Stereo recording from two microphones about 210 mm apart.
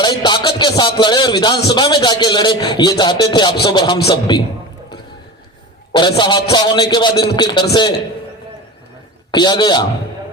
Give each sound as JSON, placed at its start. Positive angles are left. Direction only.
{"t": 0.0, "sound": "speech", "side_deg": 20}
{"t": 5.9, "sound": "speech", "side_deg": 20}
{"t": 9.3, "sound": "speech", "side_deg": 20}